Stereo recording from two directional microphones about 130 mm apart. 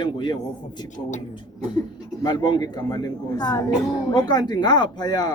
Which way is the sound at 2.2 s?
30° left (ahead or behind).